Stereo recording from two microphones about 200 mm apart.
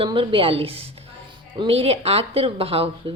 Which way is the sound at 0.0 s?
25° right (ahead or behind).